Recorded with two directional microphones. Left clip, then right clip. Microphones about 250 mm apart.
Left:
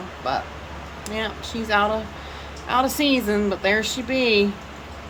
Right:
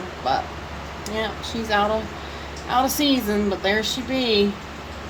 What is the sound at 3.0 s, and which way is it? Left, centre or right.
Speech, centre.